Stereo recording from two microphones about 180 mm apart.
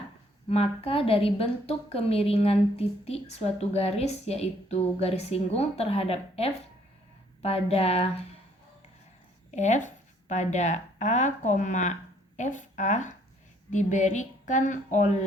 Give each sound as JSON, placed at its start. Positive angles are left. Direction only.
{"t": 0.5, "sound": "a woman's voice", "side_deg": 30}
{"t": 9.5, "sound": "a woman's voice", "side_deg": 40}